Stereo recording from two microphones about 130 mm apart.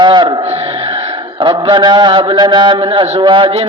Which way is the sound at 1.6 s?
35° right (ahead or behind).